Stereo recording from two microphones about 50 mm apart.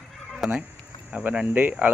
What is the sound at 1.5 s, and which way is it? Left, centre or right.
Speech, right.